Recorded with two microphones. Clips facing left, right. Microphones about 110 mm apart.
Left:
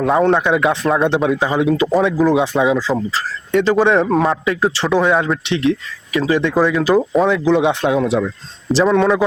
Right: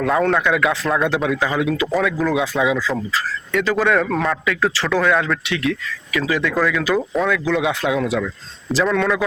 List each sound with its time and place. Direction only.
0.0 s speech: 30° left (ahead or behind)